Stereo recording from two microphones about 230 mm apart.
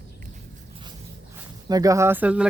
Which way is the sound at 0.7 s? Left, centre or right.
Centre.